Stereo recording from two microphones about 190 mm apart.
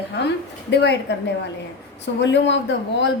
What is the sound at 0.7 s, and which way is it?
Speech, 65° left (ahead or behind).